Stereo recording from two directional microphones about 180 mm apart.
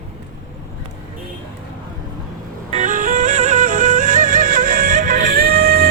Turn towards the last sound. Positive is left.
turn(degrees=-60)  # may be behind; listen again after turning